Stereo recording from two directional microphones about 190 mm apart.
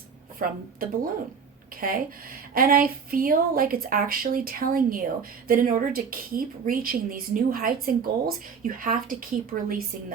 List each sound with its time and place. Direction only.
0.3 s a woman's voice: 50° right (ahead or behind)